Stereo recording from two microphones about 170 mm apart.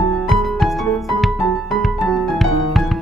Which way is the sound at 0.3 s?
Centre (ahead or behind).